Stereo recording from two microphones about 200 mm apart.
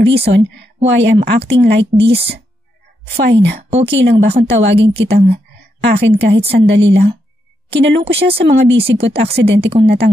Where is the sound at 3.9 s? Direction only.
60° right (ahead or behind).